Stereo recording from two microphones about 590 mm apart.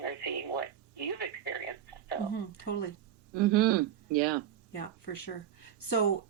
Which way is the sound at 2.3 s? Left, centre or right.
Left.